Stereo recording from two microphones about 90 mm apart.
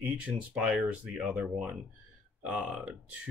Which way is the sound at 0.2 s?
5° right (ahead or behind).